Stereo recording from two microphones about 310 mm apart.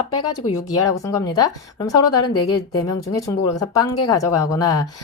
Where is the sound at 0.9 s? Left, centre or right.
Centre.